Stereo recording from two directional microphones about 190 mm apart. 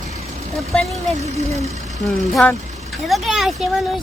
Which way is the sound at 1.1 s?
35° right (ahead or behind).